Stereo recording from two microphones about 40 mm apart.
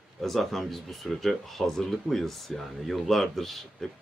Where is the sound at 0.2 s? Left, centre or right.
Centre.